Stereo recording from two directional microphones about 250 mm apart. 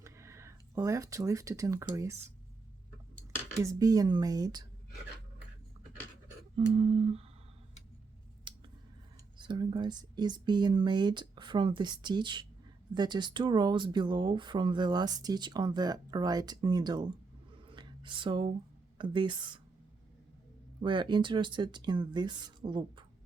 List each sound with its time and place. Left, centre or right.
0.0 s speech: centre
3.6 s speech: centre
6.7 s speech: right
8.5 s scissors: centre
9.4 s speech: centre
17.7 s a sound: centre
18.9 s speech: centre
20.8 s speech: centre